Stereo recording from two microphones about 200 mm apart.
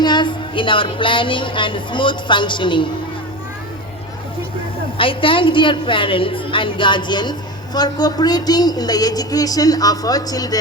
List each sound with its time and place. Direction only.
0.0 s a woman's voice: 20° left (ahead or behind)
4.9 s a woman's voice: 25° left (ahead or behind)